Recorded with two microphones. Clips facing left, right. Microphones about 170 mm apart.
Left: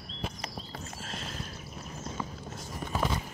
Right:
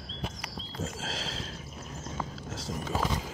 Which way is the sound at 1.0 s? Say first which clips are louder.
Right 3 dB; 90° right.